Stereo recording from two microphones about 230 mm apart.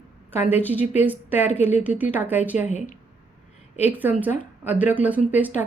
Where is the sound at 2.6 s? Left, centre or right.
Left.